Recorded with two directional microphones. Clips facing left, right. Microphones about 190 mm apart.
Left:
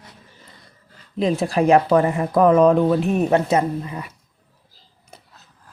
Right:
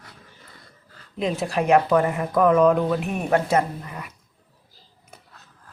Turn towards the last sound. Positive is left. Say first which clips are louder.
# left 3 dB
turn(degrees=25)  # may be behind; listen again after turning